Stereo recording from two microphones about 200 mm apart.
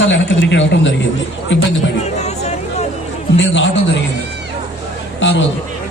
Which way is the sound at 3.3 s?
65° left (ahead or behind).